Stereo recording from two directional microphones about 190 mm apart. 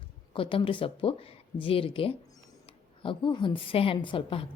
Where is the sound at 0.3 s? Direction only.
25° left (ahead or behind).